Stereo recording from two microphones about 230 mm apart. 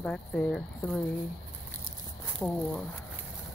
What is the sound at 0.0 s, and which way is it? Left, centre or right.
Speech, centre.